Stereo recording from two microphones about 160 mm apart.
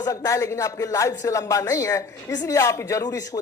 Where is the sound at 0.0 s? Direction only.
20° left (ahead or behind).